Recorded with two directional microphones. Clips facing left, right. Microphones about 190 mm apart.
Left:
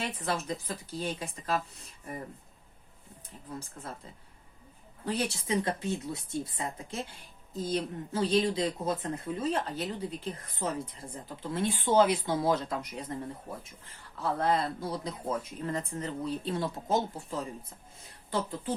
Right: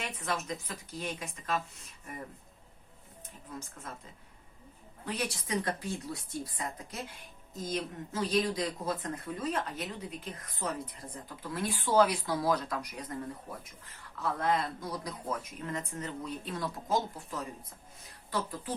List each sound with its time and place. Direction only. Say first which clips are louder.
0.0 s speech: left 3 dB; 35° left (ahead or behind)
5.0 s speech: left 4 dB; 30° left (ahead or behind)